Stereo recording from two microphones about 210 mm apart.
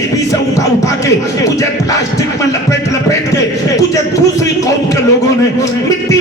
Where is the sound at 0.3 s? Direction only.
15° left (ahead or behind).